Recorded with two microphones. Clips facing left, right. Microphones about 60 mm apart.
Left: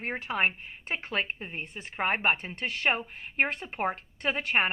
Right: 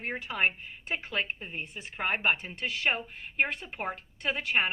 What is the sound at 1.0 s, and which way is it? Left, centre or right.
A woman's voice, left.